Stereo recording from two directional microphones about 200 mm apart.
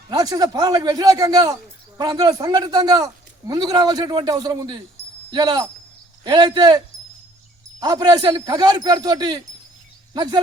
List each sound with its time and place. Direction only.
0.1 s a man's voice: 20° right (ahead or behind)